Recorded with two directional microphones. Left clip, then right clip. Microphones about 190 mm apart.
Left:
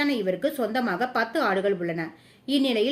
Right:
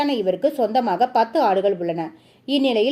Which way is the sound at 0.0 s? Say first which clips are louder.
Right 5 dB; 15° right (ahead or behind).